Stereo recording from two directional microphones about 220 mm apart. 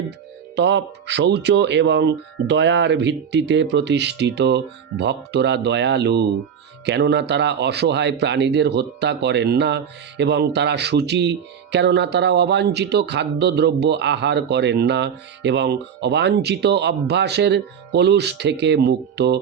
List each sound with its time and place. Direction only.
0.5 s speech: 50° right (ahead or behind)